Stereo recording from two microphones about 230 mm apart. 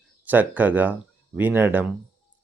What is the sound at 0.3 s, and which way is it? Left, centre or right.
Speech, centre.